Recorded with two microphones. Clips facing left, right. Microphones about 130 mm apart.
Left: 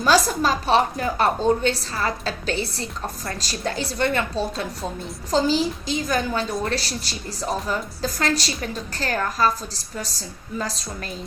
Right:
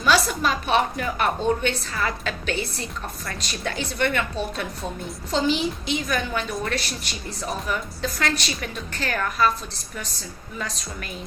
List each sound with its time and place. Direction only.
0.0 s a woman's voice: 35° left (ahead or behind)
10.6 s a woman's voice: 35° left (ahead or behind)